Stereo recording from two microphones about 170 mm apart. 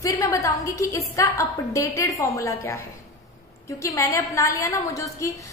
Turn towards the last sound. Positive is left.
turn(degrees=20)  # may be behind; listen again after turning